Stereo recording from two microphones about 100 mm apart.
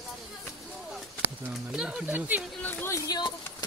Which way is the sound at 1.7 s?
10° right (ahead or behind).